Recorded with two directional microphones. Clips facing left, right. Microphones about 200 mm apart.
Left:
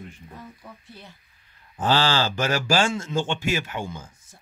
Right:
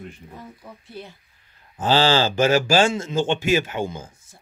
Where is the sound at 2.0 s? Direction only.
20° right (ahead or behind).